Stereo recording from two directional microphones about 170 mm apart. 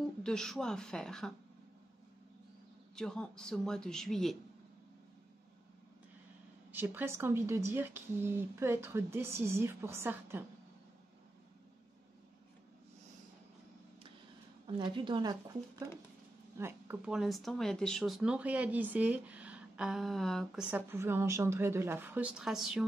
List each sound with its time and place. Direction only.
0.0 s speech: 5° left (ahead or behind)
3.0 s speech: 5° left (ahead or behind)
6.7 s speech: 10° right (ahead or behind)
14.7 s speech: 30° right (ahead or behind); by 20.6 s centre (ahead or behind)
20.7 s speech: 15° right (ahead or behind)